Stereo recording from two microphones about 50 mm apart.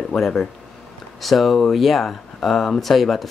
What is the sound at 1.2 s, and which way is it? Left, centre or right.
Speech, centre.